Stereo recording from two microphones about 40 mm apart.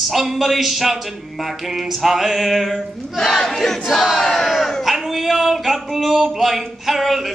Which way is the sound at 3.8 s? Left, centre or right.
Centre.